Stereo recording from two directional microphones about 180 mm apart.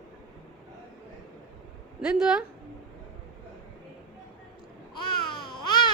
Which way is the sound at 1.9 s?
5° right (ahead or behind).